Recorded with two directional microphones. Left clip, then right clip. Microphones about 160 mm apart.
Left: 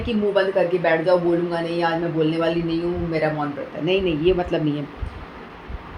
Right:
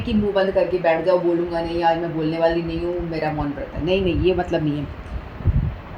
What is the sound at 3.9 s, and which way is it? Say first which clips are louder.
Speech: even; 50° right (ahead or behind).